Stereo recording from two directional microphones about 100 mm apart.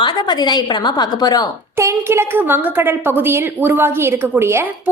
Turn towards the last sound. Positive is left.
turn(degrees=-25)  # may be behind; listen again after turning